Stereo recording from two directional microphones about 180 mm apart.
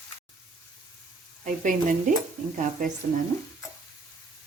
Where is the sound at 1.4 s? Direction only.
45° right (ahead or behind).